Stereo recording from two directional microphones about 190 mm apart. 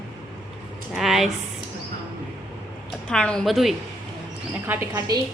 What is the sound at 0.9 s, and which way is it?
Speech, centre (ahead or behind).